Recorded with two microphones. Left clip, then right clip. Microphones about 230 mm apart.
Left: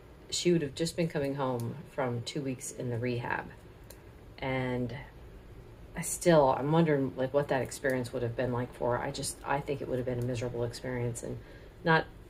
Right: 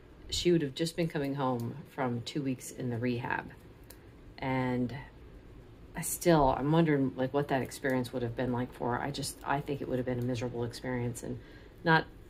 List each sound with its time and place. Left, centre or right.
0.3 s speech: right